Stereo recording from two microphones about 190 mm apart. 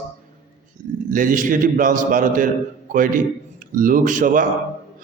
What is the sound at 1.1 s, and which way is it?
A man's voice, 45° right (ahead or behind).